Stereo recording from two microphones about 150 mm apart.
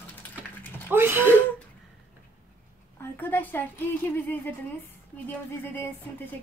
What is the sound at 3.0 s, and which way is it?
A woman's voice, 15° left (ahead or behind).